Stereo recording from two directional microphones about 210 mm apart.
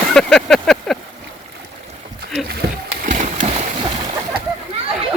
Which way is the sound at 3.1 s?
40° right (ahead or behind).